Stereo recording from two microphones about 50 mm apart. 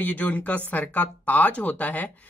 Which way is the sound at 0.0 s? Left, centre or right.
Left.